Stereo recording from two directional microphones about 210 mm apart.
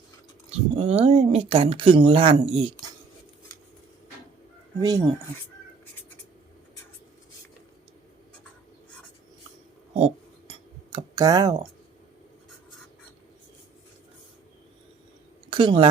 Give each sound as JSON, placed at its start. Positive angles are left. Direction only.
{"t": 0.8, "sound": "speech", "side_deg": -30}
{"t": 4.8, "sound": "speech", "side_deg": -20}
{"t": 9.9, "sound": "a sound", "side_deg": -30}
{"t": 10.9, "sound": "speech", "side_deg": -20}
{"t": 15.4, "sound": "speech", "side_deg": -25}